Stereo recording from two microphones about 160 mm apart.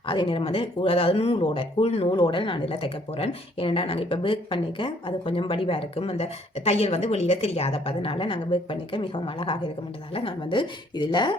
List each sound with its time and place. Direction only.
0.1 s speech: 30° left (ahead or behind)